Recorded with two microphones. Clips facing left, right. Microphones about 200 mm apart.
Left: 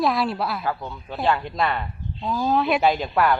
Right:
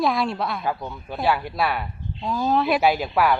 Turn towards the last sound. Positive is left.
turn(degrees=-5)  # may be behind; listen again after turning